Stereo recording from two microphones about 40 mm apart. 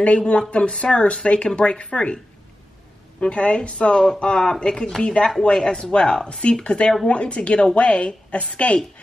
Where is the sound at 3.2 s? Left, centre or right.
Left.